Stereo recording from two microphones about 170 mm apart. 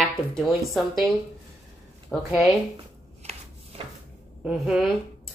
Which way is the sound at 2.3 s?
Centre (ahead or behind).